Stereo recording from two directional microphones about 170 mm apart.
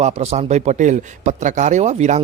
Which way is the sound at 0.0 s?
40° right (ahead or behind).